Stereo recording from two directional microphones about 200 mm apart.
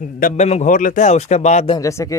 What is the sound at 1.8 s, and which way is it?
Speech, 15° left (ahead or behind).